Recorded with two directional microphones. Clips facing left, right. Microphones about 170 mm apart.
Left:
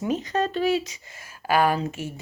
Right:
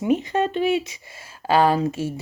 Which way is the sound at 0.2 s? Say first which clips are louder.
Right 2 dB; 20° right (ahead or behind).